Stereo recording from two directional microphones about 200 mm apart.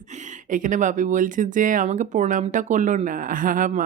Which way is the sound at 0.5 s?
40° right (ahead or behind).